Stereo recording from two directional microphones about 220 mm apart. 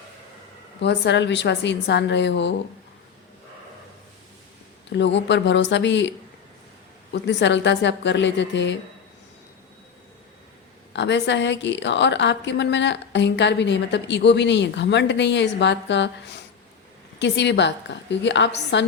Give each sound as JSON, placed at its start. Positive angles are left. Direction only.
{"t": 0.8, "sound": "a woman's voice", "side_deg": 50}
{"t": 4.9, "sound": "a woman's voice", "side_deg": 55}
{"t": 10.9, "sound": "a woman's voice", "side_deg": 55}